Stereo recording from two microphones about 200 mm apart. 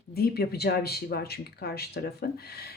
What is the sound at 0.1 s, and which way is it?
Speech, 50° left (ahead or behind).